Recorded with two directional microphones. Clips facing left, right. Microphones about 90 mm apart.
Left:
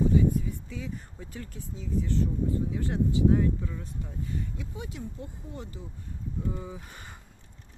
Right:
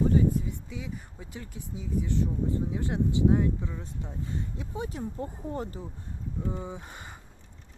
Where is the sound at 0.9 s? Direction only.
15° right (ahead or behind); by 5.9 s 40° right (ahead or behind).